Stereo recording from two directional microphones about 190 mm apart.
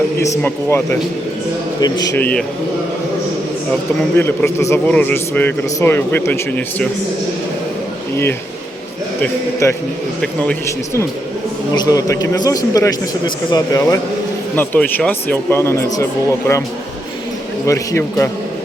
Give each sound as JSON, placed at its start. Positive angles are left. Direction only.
{"t": 0.2, "sound": "a man's voice", "side_deg": 15}
{"t": 4.2, "sound": "a man's voice", "side_deg": 15}
{"t": 9.2, "sound": "a man's voice", "side_deg": 15}
{"t": 11.7, "sound": "a man's voice", "side_deg": 20}
{"t": 17.7, "sound": "a man's voice", "side_deg": 15}